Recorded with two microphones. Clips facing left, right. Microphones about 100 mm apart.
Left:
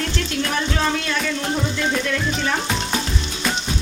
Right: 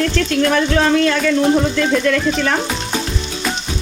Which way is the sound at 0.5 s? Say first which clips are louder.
Right 6 dB; 90° right.